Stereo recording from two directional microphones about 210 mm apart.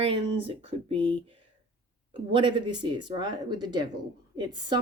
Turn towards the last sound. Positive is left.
turn(degrees=-20)  # may be behind; listen again after turning